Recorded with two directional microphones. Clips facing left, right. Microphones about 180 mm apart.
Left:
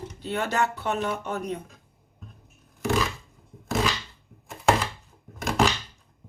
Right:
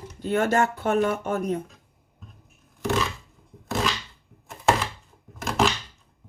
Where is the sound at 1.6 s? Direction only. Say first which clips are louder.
Even; centre (ahead or behind).